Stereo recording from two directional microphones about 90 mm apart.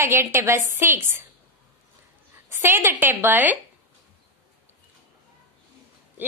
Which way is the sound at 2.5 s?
25° right (ahead or behind).